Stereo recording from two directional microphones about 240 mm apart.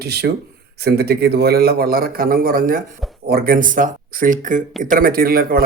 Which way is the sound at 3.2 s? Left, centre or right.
Right.